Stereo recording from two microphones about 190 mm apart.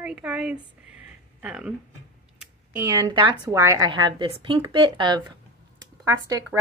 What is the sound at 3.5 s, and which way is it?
A woman's voice, 15° right (ahead or behind).